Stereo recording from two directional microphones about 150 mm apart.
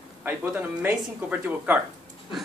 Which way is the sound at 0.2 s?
10° right (ahead or behind).